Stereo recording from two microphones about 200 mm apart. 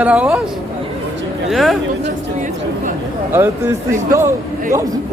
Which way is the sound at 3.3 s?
10° right (ahead or behind).